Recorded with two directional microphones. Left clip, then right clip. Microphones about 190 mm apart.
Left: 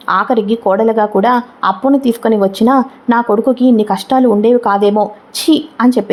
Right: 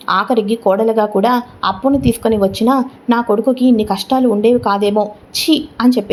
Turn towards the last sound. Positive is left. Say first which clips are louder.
# left 2 dB
turn(degrees=15)  # may be behind; listen again after turning